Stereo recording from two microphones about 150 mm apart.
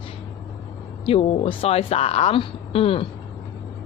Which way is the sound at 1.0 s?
40° left (ahead or behind).